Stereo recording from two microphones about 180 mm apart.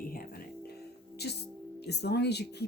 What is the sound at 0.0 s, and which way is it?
Music, 55° left (ahead or behind).